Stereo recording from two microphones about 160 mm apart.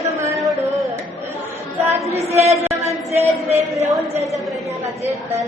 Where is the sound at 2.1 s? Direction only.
40° right (ahead or behind).